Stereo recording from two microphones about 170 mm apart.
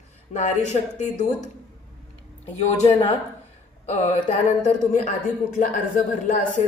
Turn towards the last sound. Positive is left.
turn(degrees=50)  # may be behind; listen again after turning